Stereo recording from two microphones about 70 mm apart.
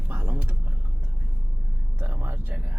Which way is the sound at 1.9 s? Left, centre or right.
Right.